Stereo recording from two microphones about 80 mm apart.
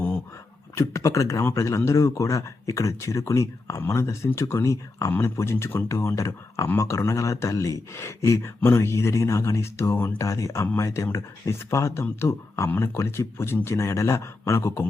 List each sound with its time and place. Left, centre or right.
0.8 s speech: left